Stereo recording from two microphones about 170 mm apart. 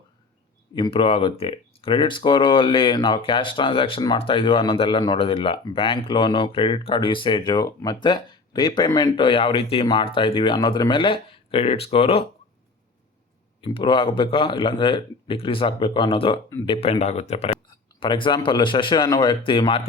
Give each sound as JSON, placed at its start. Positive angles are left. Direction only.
{"t": 0.8, "sound": "speech", "side_deg": 30}
{"t": 13.6, "sound": "speech", "side_deg": 30}